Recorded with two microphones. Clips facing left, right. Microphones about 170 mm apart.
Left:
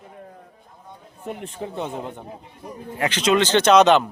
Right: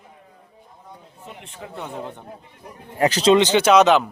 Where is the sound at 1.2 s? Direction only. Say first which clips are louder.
Left 9 dB; 45° left (ahead or behind).